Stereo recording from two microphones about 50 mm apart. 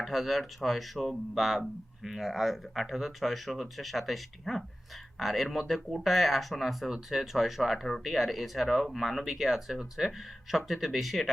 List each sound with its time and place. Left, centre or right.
0.0 s speech: centre